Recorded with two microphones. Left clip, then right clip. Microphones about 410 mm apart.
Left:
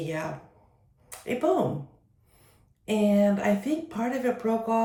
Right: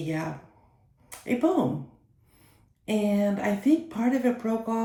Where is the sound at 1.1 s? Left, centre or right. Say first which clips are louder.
Right 2 dB; centre.